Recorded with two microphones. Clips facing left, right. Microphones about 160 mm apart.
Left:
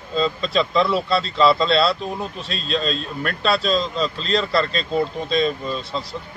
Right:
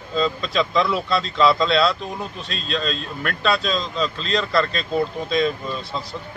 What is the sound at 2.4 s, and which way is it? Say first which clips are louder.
Speech: left 2 dB; 35° left (ahead or behind).